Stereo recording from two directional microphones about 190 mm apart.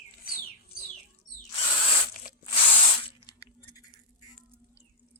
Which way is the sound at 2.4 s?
30° left (ahead or behind).